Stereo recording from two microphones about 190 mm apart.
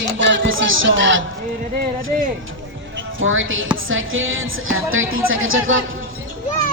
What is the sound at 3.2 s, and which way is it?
Speech, 90° right.